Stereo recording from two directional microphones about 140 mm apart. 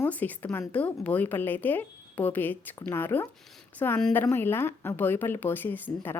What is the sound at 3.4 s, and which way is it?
Speech, 5° left (ahead or behind).